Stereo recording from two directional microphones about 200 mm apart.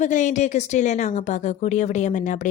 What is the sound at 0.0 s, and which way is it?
A woman's voice, 40° left (ahead or behind).